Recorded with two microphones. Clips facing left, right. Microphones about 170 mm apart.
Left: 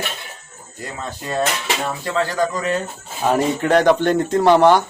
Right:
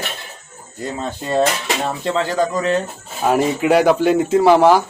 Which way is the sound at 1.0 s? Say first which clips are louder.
Right 4 dB; 25° right (ahead or behind).